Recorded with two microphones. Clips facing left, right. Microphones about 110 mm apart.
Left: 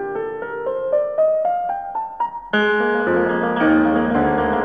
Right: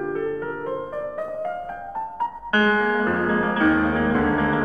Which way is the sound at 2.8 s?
25° left (ahead or behind).